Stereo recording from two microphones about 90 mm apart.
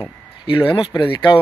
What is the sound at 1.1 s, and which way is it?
Speech, 60° left (ahead or behind).